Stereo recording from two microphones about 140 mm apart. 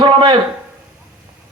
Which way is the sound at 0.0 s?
35° right (ahead or behind).